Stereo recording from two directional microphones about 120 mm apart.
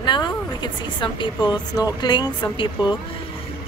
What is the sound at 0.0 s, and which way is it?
Speech, 40° left (ahead or behind).